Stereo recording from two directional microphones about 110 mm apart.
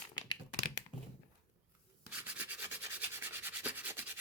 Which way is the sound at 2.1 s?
15° right (ahead or behind).